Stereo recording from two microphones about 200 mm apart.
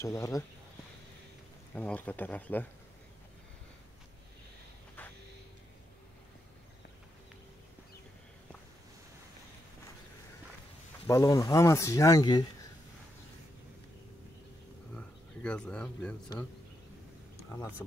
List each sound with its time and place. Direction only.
0.0 s speech: 15° left (ahead or behind)
1.8 s speech: 5° left (ahead or behind)
11.1 s speech: 15° left (ahead or behind)
15.0 s speech: 5° left (ahead or behind)